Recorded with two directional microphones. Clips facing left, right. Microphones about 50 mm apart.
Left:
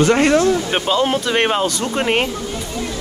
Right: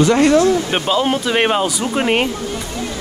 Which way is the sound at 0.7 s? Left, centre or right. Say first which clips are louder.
Even; centre.